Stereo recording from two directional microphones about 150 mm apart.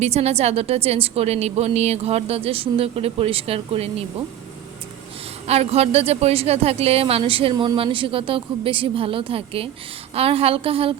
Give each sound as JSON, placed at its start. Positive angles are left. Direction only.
{"t": 0.0, "sound": "a woman's voice", "side_deg": -45}
{"t": 5.5, "sound": "a woman's voice", "side_deg": -45}
{"t": 7.5, "sound": "speech", "side_deg": -25}
{"t": 7.8, "sound": "a woman's voice", "side_deg": -35}